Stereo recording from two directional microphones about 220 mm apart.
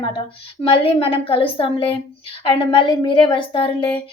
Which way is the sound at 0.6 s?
25° left (ahead or behind).